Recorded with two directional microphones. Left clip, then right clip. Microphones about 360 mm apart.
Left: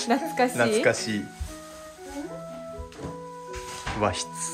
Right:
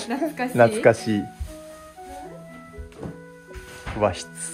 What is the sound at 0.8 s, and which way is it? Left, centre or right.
Speech, centre.